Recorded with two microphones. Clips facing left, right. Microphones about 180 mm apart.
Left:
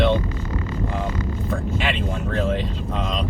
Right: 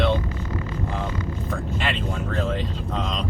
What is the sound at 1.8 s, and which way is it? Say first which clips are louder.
Speech: left 2 dB; centre (ahead or behind).